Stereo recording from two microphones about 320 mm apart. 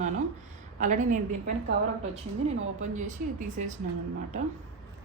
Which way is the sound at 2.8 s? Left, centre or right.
Right.